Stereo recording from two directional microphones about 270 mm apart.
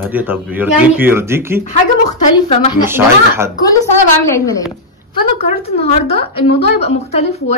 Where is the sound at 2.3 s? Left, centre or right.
Left.